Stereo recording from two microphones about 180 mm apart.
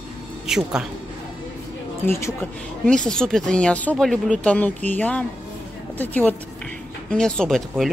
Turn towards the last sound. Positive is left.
turn(degrees=0)  # may be behind; listen again after turning